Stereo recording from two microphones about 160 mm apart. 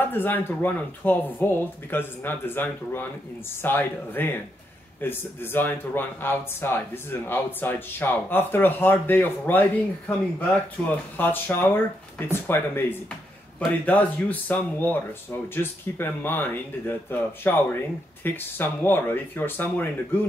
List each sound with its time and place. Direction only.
0.0 s speech: 10° left (ahead or behind)
13.8 s speech: 10° left (ahead or behind)